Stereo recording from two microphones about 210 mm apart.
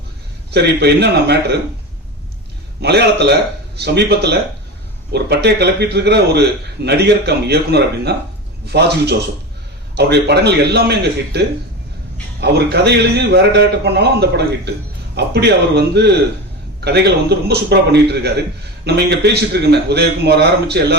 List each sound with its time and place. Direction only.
0.5 s a man's voice: 55° right (ahead or behind)
2.8 s a man's voice: 50° right (ahead or behind)